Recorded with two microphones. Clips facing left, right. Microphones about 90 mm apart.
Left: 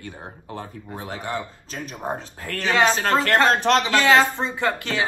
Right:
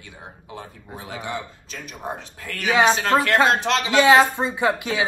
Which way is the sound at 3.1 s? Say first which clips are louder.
Right 2 dB; 15° right (ahead or behind).